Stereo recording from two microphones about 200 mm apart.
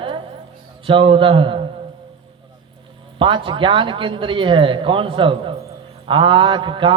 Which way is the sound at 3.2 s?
25° right (ahead or behind).